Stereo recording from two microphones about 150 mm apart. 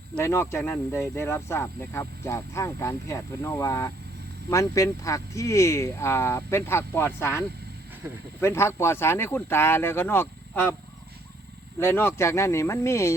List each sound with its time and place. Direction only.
0.2 s speech: 20° left (ahead or behind)
8.0 s speech: 10° right (ahead or behind)
8.4 s speech: 15° left (ahead or behind)
11.8 s speech: 15° left (ahead or behind)